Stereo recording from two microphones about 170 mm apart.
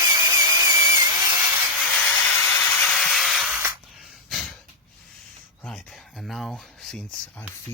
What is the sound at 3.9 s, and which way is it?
Gasp, centre (ahead or behind).